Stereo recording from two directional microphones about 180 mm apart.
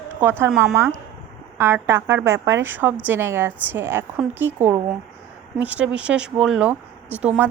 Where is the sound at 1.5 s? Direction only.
15° right (ahead or behind).